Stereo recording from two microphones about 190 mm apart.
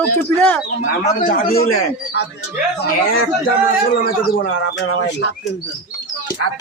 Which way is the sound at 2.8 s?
55° left (ahead or behind).